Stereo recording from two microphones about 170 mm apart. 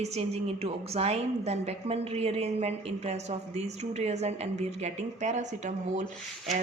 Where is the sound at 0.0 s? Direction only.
40° right (ahead or behind).